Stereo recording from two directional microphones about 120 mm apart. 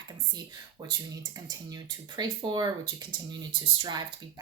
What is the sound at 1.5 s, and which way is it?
Speech, 35° right (ahead or behind).